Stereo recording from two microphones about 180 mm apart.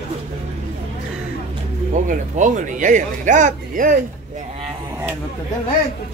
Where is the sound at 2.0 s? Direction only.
45° right (ahead or behind).